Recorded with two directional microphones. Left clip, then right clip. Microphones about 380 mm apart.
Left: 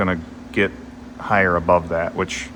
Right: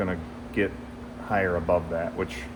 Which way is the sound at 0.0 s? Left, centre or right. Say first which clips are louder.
Left 8 dB; left.